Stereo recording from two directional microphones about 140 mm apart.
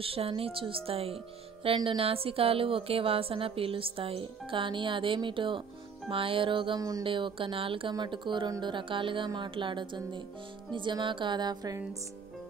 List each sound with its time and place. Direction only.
0.0 s speech: 40° right (ahead or behind)